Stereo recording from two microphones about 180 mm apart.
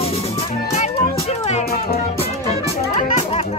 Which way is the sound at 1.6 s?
55° left (ahead or behind).